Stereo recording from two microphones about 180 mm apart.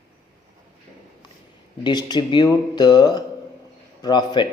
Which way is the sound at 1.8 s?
25° left (ahead or behind).